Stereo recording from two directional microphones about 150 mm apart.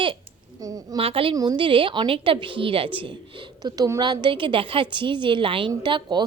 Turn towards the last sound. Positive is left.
turn(degrees=-30)  # may be behind; listen again after turning